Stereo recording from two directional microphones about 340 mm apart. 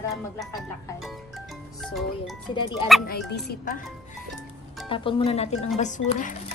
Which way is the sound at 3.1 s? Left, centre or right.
Left.